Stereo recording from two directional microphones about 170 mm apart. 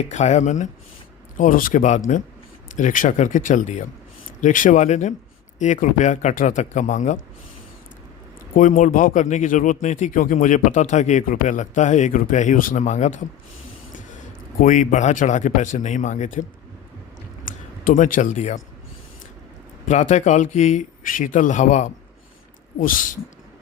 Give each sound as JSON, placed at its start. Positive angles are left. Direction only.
{"t": 0.0, "sound": "speech", "side_deg": 45}
{"t": 8.5, "sound": "speech", "side_deg": 50}
{"t": 14.6, "sound": "speech", "side_deg": 50}
{"t": 17.4, "sound": "speech", "side_deg": 50}
{"t": 19.9, "sound": "speech", "side_deg": 45}